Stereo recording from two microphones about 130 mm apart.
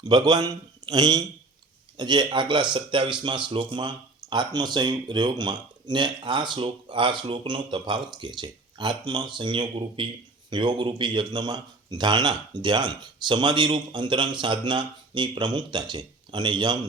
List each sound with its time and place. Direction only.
0.0 s speech: 30° right (ahead or behind)